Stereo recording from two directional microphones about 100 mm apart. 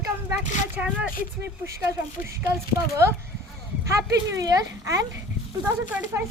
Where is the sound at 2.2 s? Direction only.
30° right (ahead or behind).